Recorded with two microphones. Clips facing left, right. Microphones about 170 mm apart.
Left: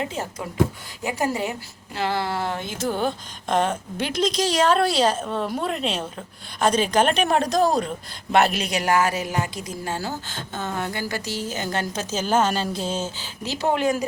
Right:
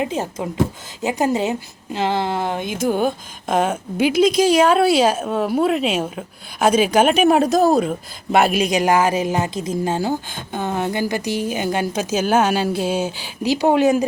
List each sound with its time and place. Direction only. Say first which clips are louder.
0.0 s a woman's voice: right 6 dB; 20° right (ahead or behind)